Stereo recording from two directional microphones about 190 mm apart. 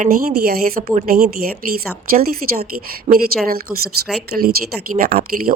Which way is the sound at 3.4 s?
50° right (ahead or behind).